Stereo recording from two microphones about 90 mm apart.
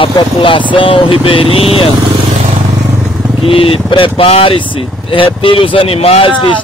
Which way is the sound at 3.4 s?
90° left.